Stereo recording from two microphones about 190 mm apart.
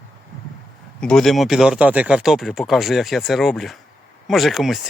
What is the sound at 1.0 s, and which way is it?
Speech, centre (ahead or behind).